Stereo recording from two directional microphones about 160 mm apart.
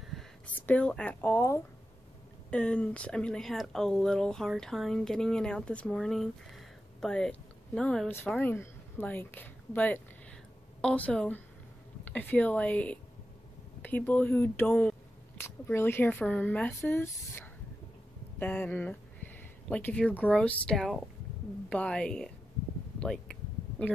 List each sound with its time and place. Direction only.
0.1 s a sound: centre (ahead or behind)
0.6 s speech: 10° left (ahead or behind)
18.4 s speech: 10° left (ahead or behind)